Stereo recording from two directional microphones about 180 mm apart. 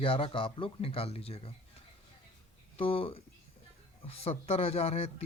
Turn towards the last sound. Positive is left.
turn(degrees=35)  # may be behind; listen again after turning